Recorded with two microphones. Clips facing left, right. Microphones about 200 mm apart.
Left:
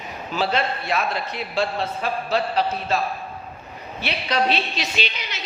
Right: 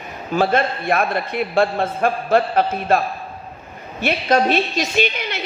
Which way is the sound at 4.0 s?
45° right (ahead or behind).